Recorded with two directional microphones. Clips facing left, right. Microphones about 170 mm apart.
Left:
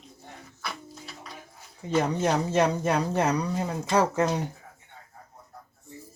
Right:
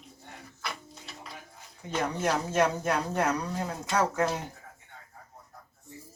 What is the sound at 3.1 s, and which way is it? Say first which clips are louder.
Speech: left 3 dB; 20° left (ahead or behind).